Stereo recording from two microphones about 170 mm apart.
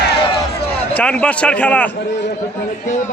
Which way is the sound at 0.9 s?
5° left (ahead or behind).